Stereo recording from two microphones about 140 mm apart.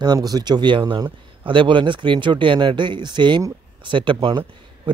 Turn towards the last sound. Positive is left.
turn(degrees=-35)  # may be behind; listen again after turning